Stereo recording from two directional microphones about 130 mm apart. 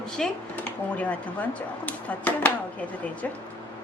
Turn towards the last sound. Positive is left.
turn(degrees=10)  # may be behind; listen again after turning